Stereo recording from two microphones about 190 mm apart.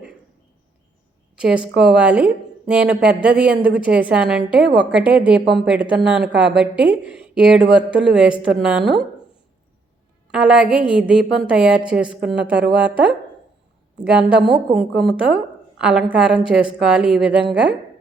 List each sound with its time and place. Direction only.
1.4 s a woman's voice: 5° right (ahead or behind)
4.6 s a woman's voice: 65° right (ahead or behind)
4.9 s a woman's voice: 5° right (ahead or behind)
10.3 s a woman's voice: 5° right (ahead or behind)
14.1 s a woman's voice: 5° right (ahead or behind)